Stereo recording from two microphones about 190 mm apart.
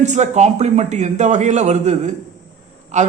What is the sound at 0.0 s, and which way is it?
Speech, 40° right (ahead or behind).